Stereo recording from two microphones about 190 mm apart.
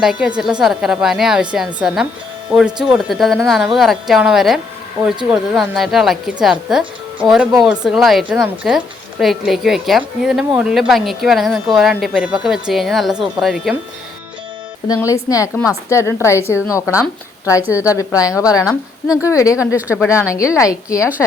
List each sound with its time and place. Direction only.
0.0 s speech: 5° right (ahead or behind)
14.8 s a woman's voice: 15° left (ahead or behind)
19.5 s speech: 5° right (ahead or behind)
20.1 s a woman's voice: 15° left (ahead or behind)